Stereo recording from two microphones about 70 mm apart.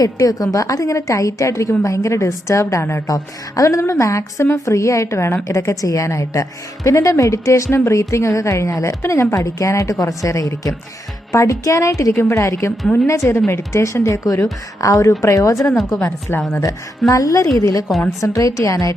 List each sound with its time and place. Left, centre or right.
0.2 s a woman's voice: left
16.3 s a woman's voice: left
17.1 s a woman's voice: left